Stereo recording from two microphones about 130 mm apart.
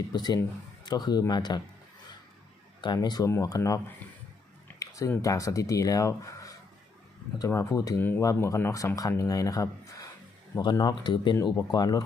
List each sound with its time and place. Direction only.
0.1 s speech: 35° left (ahead or behind)
2.8 s speech: 35° left (ahead or behind)
4.8 s a sound: 25° left (ahead or behind)
5.2 s speech: 25° left (ahead or behind)